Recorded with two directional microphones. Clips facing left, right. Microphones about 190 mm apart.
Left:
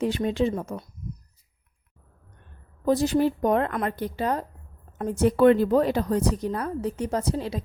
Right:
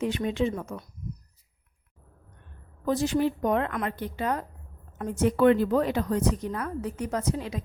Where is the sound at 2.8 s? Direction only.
35° left (ahead or behind).